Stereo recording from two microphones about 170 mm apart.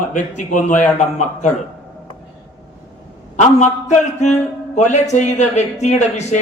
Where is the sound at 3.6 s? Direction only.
45° left (ahead or behind).